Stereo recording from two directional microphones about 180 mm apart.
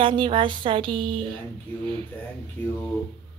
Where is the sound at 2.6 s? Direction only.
10° left (ahead or behind).